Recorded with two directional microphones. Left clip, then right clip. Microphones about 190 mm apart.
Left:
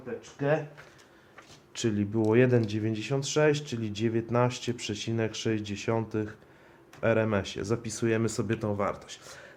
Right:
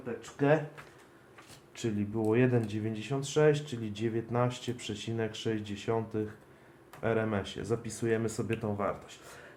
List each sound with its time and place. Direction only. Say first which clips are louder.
1.7 s speech: left 5 dB; 55° left (ahead or behind)